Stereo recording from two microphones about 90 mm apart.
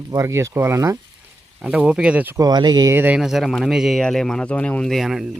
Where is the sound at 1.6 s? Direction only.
10° right (ahead or behind).